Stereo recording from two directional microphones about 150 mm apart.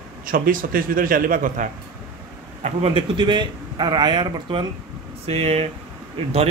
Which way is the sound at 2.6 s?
40° right (ahead or behind).